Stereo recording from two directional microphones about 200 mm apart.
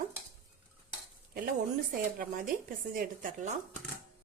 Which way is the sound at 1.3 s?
45° right (ahead or behind).